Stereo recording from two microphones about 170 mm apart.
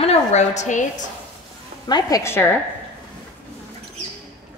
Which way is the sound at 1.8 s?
25° left (ahead or behind).